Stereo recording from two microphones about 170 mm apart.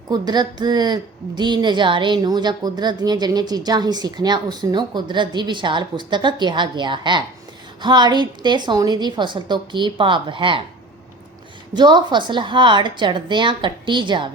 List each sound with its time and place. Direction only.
0.1 s a woman's voice: 25° right (ahead or behind)
11.7 s a woman's voice: 25° right (ahead or behind)